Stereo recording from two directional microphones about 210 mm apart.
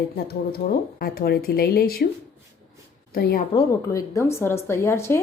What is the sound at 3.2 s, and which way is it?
Speech, 50° left (ahead or behind).